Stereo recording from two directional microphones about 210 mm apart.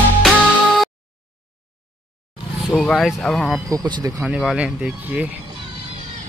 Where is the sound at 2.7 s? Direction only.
Centre (ahead or behind).